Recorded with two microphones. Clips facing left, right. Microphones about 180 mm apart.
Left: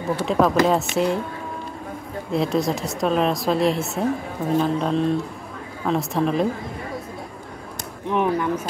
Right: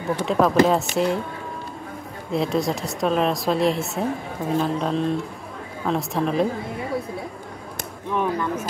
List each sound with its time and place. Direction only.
0.2 s a woman's voice: centre (ahead or behind)
2.3 s a woman's voice: centre (ahead or behind)
8.1 s speech: 15° left (ahead or behind)